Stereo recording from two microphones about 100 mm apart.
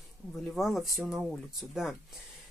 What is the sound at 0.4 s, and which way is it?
Speech, centre (ahead or behind).